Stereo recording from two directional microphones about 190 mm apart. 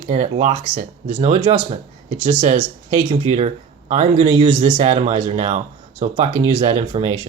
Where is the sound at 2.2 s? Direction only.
40° right (ahead or behind).